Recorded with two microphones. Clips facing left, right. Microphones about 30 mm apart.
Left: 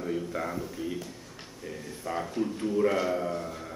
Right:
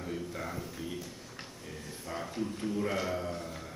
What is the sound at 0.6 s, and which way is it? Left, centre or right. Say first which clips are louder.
A man's voice: left 5 dB; centre.